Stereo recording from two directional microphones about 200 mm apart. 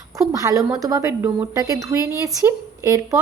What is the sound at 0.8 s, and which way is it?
Speech, 15° right (ahead or behind).